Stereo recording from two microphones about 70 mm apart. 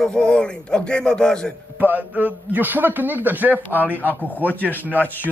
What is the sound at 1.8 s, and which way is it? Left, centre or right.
A man's voice, right.